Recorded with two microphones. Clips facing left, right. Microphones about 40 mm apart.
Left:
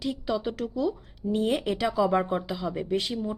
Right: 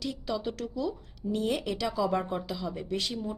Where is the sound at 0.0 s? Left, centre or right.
Centre.